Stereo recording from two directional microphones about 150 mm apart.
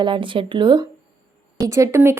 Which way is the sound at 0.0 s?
35° right (ahead or behind).